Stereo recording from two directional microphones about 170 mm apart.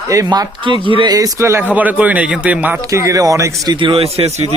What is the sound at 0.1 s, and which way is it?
A man's voice, 20° right (ahead or behind).